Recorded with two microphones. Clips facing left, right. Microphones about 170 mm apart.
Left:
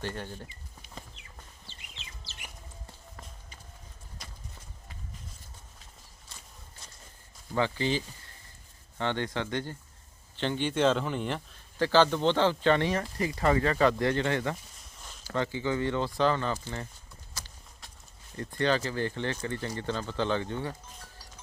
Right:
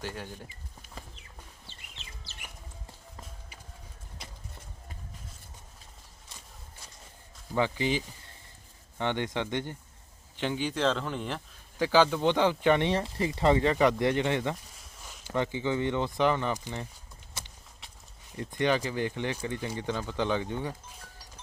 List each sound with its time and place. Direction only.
0.0 s speech: 5° right (ahead or behind)
7.5 s speech: 15° right (ahead or behind)
10.3 s speech: 5° right (ahead or behind)
11.8 s speech: 10° right (ahead or behind)
17.4 s clip-clop: 25° right (ahead or behind)
18.3 s speech: 15° right (ahead or behind)